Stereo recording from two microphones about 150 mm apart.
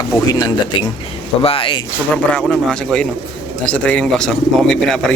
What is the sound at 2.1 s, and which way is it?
Speech, 5° left (ahead or behind).